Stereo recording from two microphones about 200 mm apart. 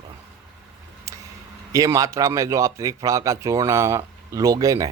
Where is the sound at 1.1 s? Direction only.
15° right (ahead or behind).